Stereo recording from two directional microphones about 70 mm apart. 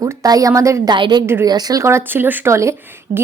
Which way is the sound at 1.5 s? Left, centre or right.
Right.